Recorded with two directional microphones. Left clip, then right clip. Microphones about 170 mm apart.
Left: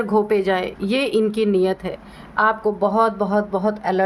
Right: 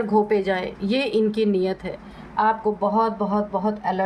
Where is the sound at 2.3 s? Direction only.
45° left (ahead or behind).